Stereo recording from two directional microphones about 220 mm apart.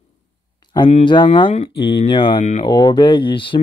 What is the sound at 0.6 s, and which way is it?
Speech, 20° left (ahead or behind).